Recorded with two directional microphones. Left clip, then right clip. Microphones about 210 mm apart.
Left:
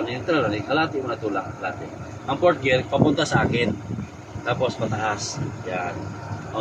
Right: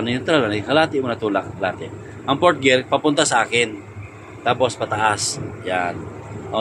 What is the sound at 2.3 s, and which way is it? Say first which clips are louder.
Speech: right 4 dB; 55° right (ahead or behind).